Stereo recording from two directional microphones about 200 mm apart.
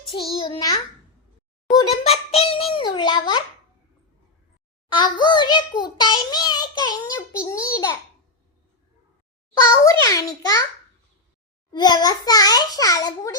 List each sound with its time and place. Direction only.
0.3 s a child's voice: 25° left (ahead or behind)
4.9 s a child's voice: 20° left (ahead or behind)
9.6 s a child's voice: 15° left (ahead or behind)
11.7 s a child's voice: 20° left (ahead or behind)